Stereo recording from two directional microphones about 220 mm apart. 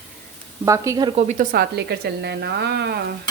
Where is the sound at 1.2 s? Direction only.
35° right (ahead or behind).